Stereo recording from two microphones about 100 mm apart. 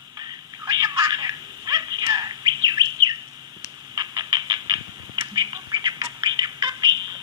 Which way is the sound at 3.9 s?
45° right (ahead or behind).